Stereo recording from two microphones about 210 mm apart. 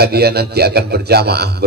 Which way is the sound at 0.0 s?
50° right (ahead or behind).